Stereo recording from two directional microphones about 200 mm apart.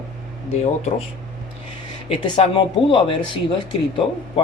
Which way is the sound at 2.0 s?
25° left (ahead or behind).